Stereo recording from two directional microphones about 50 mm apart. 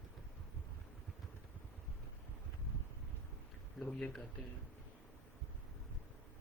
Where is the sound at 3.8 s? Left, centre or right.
Centre.